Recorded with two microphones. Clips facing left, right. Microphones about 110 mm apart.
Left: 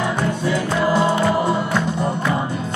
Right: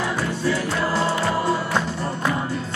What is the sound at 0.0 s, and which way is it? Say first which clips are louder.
Music: left 3 dB; 20° left (ahead or behind).